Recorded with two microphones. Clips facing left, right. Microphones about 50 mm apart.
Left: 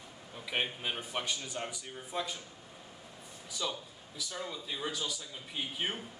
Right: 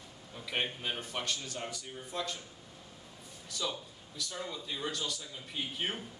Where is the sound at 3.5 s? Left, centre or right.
Centre.